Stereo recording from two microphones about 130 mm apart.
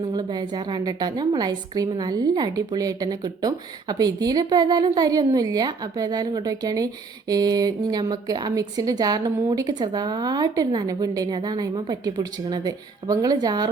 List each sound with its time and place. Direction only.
0.0 s a woman's voice: 35° right (ahead or behind)